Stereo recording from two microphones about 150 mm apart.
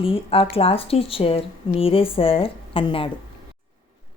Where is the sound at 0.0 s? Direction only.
40° left (ahead or behind).